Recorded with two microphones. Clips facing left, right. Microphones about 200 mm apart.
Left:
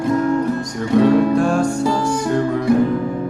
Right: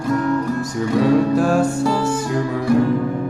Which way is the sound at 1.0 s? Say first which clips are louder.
Left 2 dB; 5° right (ahead or behind).